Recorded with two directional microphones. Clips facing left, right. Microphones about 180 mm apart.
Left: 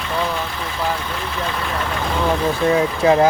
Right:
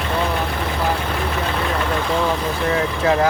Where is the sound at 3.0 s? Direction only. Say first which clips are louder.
Left 4 dB; 20° left (ahead or behind).